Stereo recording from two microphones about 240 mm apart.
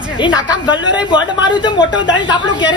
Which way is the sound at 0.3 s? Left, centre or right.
Centre.